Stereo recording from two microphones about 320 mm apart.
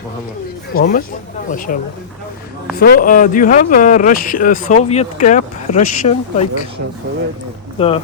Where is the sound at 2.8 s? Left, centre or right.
Left.